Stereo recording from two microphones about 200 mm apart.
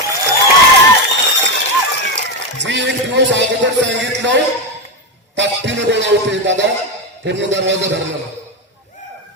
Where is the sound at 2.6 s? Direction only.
60° right (ahead or behind).